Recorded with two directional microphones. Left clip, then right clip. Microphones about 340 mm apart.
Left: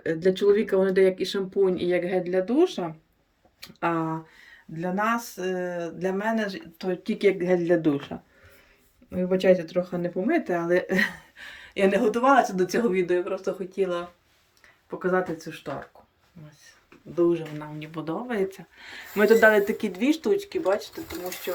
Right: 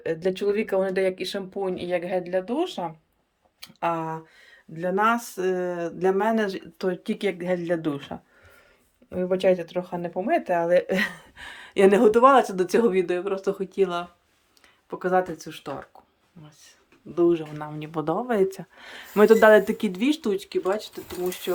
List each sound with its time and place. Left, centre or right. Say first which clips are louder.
0.2 s speech: left 7 dB; centre
1.7 s speech: left 1 dB; right
4.8 s speech: right 4 dB; centre
9.0 s speech: even; centre
17.2 s speech: right 2 dB; centre